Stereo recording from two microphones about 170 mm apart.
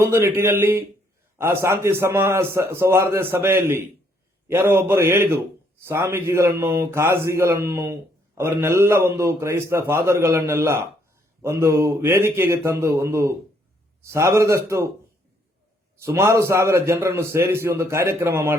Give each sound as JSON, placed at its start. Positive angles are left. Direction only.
{"t": 0.0, "sound": "a man's voice", "side_deg": -15}
{"t": 16.0, "sound": "a man's voice", "side_deg": -15}